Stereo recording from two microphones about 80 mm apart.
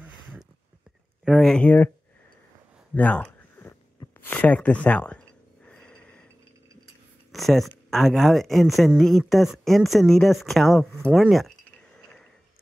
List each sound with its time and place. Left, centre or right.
1.3 s speech: centre
2.9 s a sound: centre
4.3 s speech: centre
5.7 s snort: centre
7.3 s speech: centre